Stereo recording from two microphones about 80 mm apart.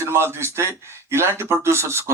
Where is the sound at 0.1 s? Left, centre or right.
Right.